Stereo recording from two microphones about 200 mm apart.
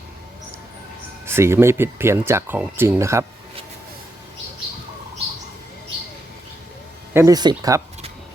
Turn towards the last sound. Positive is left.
turn(degrees=-15)  # may be behind; listen again after turning